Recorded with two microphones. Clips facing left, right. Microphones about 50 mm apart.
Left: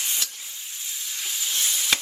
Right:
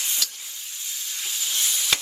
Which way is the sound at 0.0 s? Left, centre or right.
Left.